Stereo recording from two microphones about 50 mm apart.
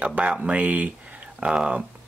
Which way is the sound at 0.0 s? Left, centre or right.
Right.